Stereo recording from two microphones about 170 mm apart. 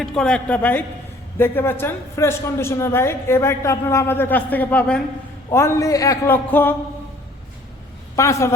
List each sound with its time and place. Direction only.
0.0 s a man's voice: 5° left (ahead or behind)
8.1 s a man's voice: 15° left (ahead or behind)